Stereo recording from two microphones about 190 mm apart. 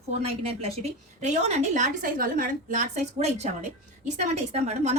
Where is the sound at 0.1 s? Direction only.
30° right (ahead or behind).